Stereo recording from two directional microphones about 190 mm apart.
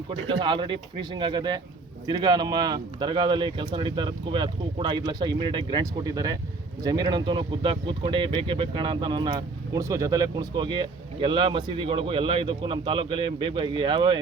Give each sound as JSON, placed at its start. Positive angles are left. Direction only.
{"t": 0.1, "sound": "speech", "side_deg": -25}